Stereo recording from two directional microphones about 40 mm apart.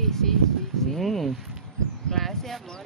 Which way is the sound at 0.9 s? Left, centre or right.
Centre.